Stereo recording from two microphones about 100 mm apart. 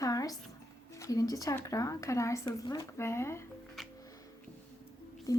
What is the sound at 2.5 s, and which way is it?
Speech, 40° left (ahead or behind).